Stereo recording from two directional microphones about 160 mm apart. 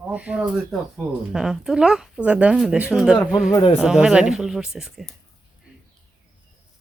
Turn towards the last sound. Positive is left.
turn(degrees=0)  # may be behind; listen again after turning